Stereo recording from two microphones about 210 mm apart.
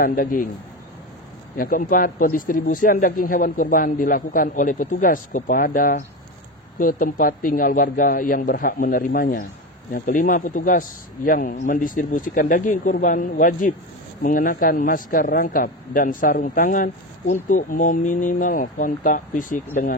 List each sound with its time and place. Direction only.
0.0 s a man's voice: 40° left (ahead or behind)
1.6 s a man's voice: 40° left (ahead or behind)